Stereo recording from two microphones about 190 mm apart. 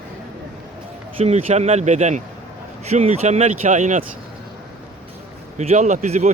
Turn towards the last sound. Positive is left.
turn(degrees=-35)  # may be behind; listen again after turning